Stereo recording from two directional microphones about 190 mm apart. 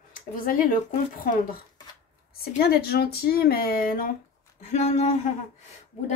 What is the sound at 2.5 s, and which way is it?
Speech, 55° left (ahead or behind).